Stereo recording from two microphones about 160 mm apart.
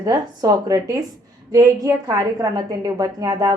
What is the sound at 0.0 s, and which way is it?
A woman's voice, 20° right (ahead or behind).